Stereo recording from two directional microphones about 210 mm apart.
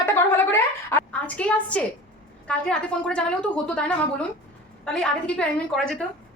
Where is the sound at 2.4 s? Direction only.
5° left (ahead or behind).